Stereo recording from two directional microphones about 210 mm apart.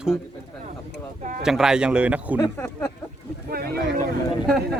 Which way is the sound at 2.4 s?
10° left (ahead or behind).